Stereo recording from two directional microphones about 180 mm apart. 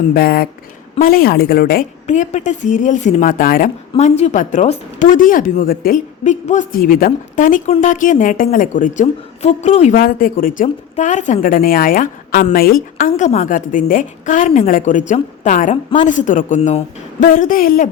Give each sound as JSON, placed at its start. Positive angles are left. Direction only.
{"t": 0.1, "sound": "a woman's voice", "side_deg": 55}
{"t": 2.0, "sound": "a woman's voice", "side_deg": 40}
{"t": 3.9, "sound": "a woman's voice", "side_deg": 40}